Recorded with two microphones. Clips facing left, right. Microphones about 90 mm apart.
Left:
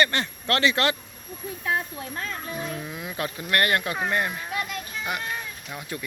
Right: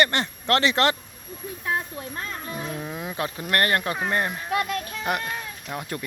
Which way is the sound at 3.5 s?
35° right (ahead or behind).